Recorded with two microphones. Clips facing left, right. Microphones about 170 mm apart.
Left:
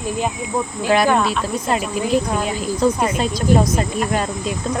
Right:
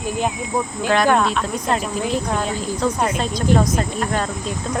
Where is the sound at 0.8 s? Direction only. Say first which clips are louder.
Left 1 dB; 10° left (ahead or behind).